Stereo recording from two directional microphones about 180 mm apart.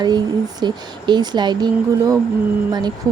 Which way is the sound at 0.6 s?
25° right (ahead or behind).